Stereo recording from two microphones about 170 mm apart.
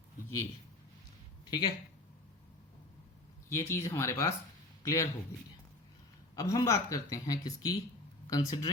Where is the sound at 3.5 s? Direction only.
15° left (ahead or behind).